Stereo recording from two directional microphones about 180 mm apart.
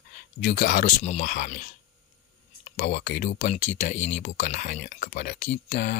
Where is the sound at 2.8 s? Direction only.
55° left (ahead or behind).